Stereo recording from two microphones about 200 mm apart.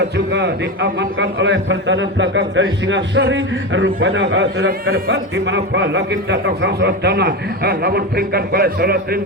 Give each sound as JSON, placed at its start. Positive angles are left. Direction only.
{"t": 0.3, "sound": "a man's voice", "side_deg": -60}